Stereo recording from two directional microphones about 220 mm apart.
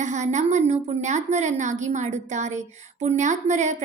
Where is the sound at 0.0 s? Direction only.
30° right (ahead or behind).